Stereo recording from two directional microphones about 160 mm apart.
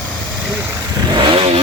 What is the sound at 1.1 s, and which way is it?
Vehicle, 30° right (ahead or behind).